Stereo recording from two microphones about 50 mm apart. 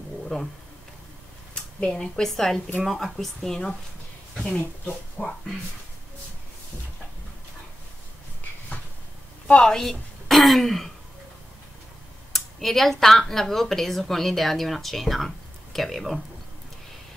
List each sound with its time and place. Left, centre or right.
0.3 s a woman's voice: centre
1.5 s a sound: centre
2.2 s a woman's voice: centre
4.6 s speech: left
9.5 s a woman's voice: centre
12.4 s speech: centre